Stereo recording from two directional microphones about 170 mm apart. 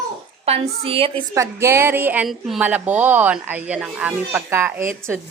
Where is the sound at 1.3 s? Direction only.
15° right (ahead or behind).